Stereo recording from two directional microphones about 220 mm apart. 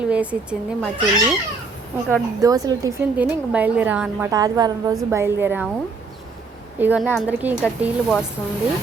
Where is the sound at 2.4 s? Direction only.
15° right (ahead or behind).